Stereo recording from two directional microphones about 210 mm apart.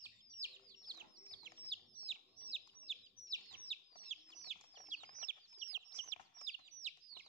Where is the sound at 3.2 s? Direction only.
20° right (ahead or behind).